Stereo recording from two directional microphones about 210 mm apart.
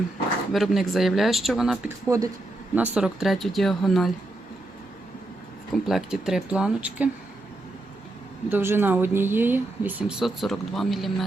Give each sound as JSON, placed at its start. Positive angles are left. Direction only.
{"t": 0.5, "sound": "speech", "side_deg": 0}
{"t": 2.0, "sound": "speech", "side_deg": -15}
{"t": 5.8, "sound": "speech", "side_deg": 0}
{"t": 8.4, "sound": "speech", "side_deg": -10}